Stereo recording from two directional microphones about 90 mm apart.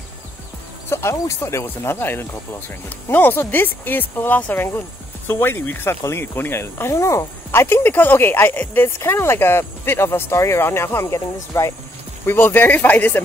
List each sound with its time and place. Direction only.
0.8 s speech: 30° left (ahead or behind)
12.3 s speech: 20° left (ahead or behind)